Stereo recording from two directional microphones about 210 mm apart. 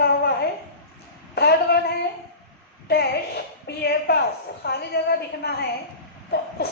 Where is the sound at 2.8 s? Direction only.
50° left (ahead or behind).